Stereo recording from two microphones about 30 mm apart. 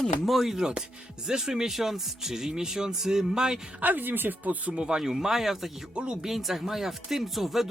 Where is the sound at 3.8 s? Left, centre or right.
Right.